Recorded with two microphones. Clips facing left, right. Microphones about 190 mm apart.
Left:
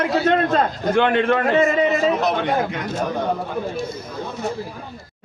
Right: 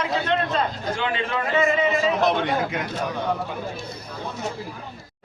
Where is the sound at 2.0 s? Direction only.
Centre (ahead or behind).